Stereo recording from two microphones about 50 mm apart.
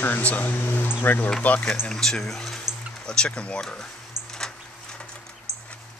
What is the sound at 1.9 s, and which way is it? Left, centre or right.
Speech, centre.